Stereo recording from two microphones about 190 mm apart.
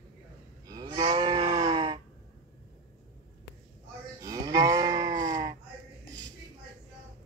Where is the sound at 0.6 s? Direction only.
20° right (ahead or behind).